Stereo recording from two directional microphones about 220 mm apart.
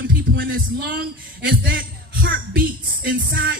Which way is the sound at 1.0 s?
50° right (ahead or behind).